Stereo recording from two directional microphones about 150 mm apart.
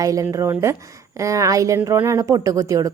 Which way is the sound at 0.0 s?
20° right (ahead or behind).